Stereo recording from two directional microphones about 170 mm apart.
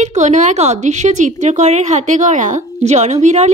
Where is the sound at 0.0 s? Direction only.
45° right (ahead or behind).